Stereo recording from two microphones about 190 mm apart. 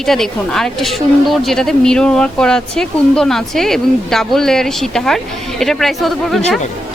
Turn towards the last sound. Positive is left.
turn(degrees=0)  # may be behind; listen again after turning